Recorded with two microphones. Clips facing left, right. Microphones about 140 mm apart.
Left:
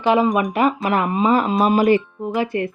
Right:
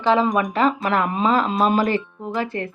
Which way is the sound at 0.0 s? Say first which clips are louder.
Left 2 dB; 15° left (ahead or behind).